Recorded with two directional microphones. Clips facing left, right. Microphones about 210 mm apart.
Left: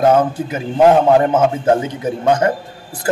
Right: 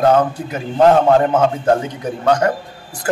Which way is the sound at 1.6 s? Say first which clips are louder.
Left 1 dB; 20° left (ahead or behind).